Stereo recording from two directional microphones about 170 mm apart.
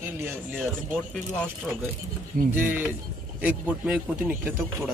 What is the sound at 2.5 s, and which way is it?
A man's voice, 10° right (ahead or behind).